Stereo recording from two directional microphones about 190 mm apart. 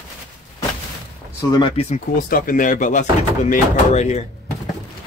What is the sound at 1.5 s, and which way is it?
Speech, 25° left (ahead or behind).